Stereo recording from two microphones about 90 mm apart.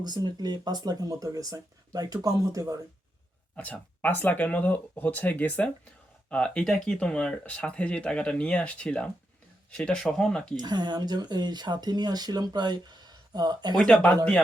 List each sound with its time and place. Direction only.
0.0 s speech: 50° right (ahead or behind)
3.5 s speech: 15° left (ahead or behind)
10.6 s speech: 50° right (ahead or behind)
13.7 s speech: 5° left (ahead or behind)